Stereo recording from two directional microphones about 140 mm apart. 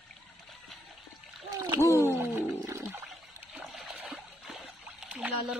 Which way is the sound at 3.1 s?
Centre (ahead or behind).